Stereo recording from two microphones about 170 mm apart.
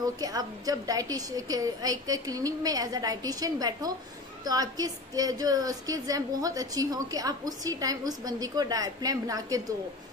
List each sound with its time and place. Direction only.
0.0 s a woman's voice: 20° right (ahead or behind)